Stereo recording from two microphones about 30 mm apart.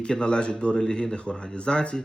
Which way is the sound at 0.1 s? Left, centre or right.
Left.